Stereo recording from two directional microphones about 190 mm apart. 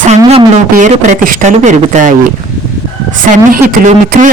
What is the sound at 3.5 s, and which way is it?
Speech, 45° right (ahead or behind).